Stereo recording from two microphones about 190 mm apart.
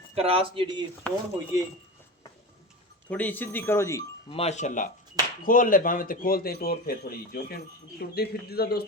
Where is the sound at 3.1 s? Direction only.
10° left (ahead or behind).